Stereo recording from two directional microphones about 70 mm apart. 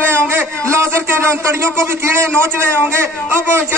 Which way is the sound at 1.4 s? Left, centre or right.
Right.